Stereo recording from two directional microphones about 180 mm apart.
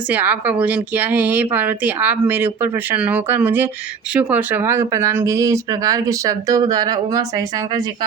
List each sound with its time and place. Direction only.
0.1 s speech: 10° right (ahead or behind)